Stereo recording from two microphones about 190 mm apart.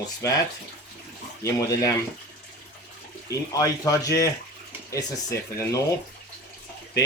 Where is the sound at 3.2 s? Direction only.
15° left (ahead or behind).